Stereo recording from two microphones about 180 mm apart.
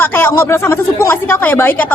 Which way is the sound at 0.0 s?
10° left (ahead or behind).